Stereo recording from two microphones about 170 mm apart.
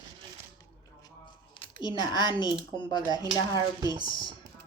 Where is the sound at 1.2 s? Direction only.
25° left (ahead or behind).